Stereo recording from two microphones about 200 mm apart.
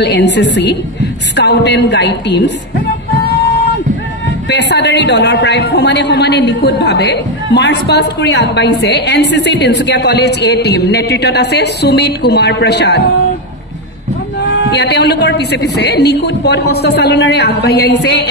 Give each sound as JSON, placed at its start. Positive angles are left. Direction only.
{"t": 0.0, "sound": "a woman's voice", "side_deg": 60}
{"t": 4.5, "sound": "a woman's voice", "side_deg": 60}
{"t": 14.4, "sound": "a woman's voice", "side_deg": 60}